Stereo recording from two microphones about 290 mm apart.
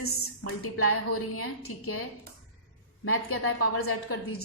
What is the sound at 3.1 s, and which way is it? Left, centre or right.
A woman's voice, left.